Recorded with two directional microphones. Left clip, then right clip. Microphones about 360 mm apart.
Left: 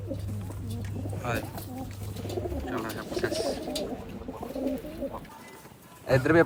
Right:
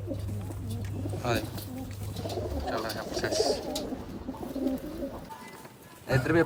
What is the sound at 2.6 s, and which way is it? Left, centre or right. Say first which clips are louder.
Bird: right 1 dB; centre.